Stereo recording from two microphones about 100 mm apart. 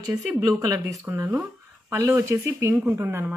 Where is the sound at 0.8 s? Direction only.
25° right (ahead or behind).